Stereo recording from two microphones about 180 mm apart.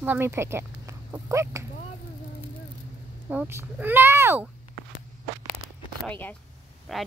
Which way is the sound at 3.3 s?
10° right (ahead or behind).